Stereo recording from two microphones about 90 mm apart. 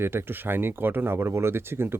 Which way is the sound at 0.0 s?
25° right (ahead or behind).